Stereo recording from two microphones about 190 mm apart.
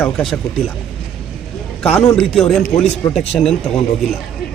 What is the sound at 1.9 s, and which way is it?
Speech, 5° left (ahead or behind).